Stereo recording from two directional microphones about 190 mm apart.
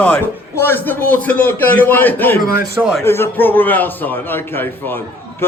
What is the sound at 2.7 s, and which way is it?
Speech, 5° right (ahead or behind).